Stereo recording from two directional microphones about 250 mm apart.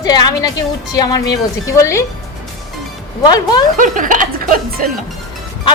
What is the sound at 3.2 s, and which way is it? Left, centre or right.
Speech, centre.